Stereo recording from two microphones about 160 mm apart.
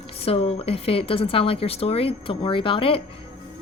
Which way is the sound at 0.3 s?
40° left (ahead or behind).